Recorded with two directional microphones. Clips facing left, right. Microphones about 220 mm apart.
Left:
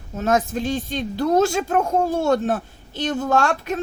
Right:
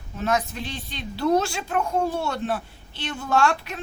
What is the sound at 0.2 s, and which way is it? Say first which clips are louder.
A woman's voice: left 5 dB; 45° left (ahead or behind).